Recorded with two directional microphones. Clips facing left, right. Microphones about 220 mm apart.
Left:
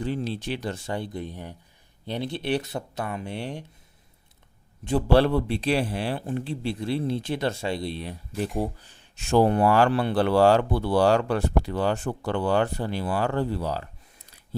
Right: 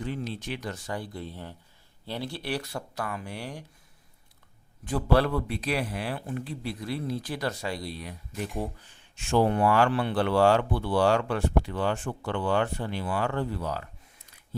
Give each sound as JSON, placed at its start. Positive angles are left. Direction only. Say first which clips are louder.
{"t": 0.0, "sound": "speech", "louder": "left 5 dB", "side_deg": 30}
{"t": 4.9, "sound": "a man's voice", "louder": "left 4 dB", "side_deg": 30}